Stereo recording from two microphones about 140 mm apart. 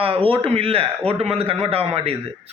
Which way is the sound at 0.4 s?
45° right (ahead or behind).